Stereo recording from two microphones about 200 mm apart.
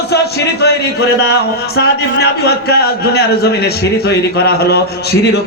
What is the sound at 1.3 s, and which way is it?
A man's voice, 55° left (ahead or behind).